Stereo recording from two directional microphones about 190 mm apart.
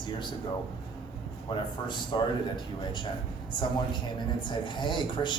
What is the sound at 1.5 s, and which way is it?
Speech, 25° left (ahead or behind).